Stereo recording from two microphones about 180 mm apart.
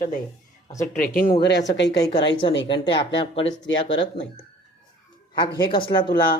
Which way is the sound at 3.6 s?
90° left.